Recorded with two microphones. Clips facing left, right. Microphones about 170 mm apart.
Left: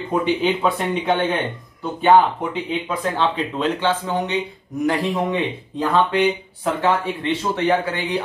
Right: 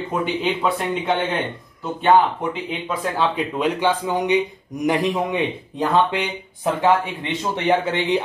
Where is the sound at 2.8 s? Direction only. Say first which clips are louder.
Right 1 dB; 5° right (ahead or behind); by 8.2 s 20° right (ahead or behind).